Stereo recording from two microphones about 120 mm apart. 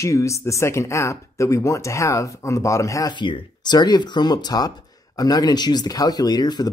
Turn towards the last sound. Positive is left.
turn(degrees=35)  # may be behind; listen again after turning